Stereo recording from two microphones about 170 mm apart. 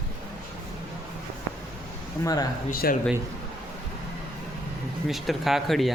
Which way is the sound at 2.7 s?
60° left (ahead or behind).